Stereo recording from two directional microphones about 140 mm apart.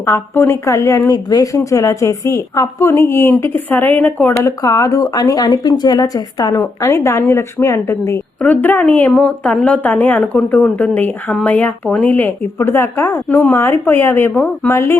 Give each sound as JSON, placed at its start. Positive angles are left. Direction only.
{"t": 0.0, "sound": "speech", "side_deg": 15}
{"t": 4.4, "sound": "a woman's voice", "side_deg": 25}